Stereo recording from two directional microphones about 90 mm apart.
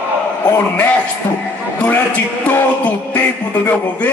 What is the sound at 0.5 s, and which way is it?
Music, 20° left (ahead or behind).